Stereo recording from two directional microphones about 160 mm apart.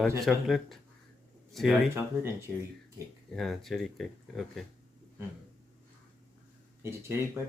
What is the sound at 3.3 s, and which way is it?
Speech, centre (ahead or behind).